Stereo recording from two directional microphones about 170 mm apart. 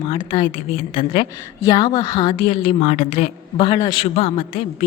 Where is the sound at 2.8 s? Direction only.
45° left (ahead or behind).